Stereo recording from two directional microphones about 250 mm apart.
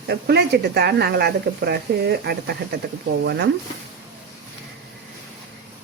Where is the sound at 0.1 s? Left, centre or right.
Right.